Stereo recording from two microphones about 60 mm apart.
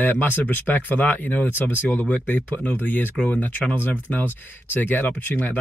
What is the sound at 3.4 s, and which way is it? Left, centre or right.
Speech, left.